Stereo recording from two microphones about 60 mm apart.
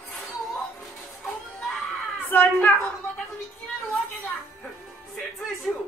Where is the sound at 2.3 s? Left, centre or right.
Left.